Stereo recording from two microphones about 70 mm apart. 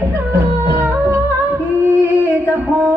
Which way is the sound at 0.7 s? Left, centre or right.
Right.